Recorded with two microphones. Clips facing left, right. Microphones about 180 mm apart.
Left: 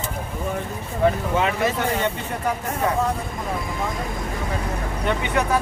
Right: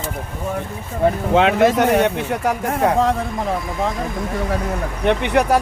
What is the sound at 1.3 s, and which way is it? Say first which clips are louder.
Speech: right 8 dB; 80° right.